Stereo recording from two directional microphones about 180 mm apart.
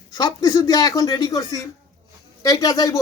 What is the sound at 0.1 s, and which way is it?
Speech, 20° left (ahead or behind).